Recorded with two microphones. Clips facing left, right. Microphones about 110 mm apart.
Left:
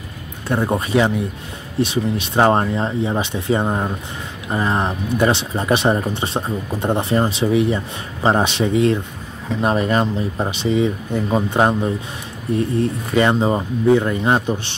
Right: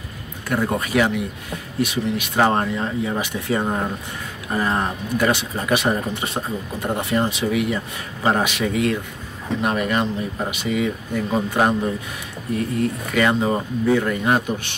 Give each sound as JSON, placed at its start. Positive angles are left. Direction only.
{"t": 0.5, "sound": "speech", "side_deg": 25}